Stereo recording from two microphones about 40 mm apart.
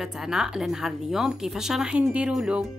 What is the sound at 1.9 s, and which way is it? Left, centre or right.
Speech, right.